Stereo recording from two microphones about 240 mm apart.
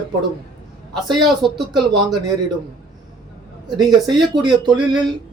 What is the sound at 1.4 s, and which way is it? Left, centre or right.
Speech, centre.